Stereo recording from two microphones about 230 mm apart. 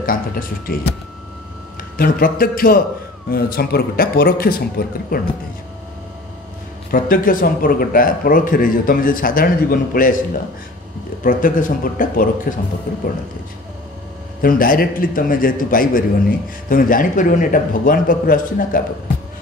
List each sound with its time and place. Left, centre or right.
0.0 s a man's voice: left
2.0 s a man's voice: left
6.9 s a man's voice: left
14.4 s a man's voice: left